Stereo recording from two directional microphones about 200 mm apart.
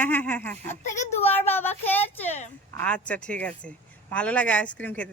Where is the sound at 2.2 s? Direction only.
35° left (ahead or behind).